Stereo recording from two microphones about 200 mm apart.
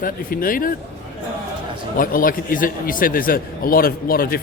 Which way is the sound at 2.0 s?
45° left (ahead or behind).